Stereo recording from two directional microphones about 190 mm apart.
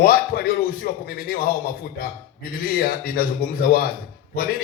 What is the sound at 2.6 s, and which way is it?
A man's voice, 50° left (ahead or behind).